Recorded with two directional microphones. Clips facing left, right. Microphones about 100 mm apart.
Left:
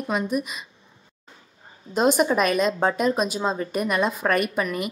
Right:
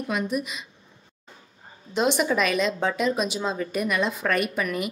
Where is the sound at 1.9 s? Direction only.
45° left (ahead or behind).